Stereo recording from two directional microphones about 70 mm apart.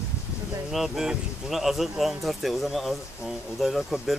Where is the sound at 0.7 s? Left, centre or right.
Centre.